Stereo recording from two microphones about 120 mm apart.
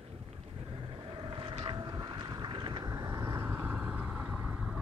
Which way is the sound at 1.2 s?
40° right (ahead or behind).